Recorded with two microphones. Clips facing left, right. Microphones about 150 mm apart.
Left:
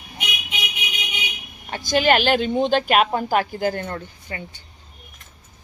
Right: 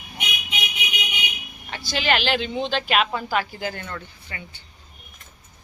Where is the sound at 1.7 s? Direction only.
45° left (ahead or behind).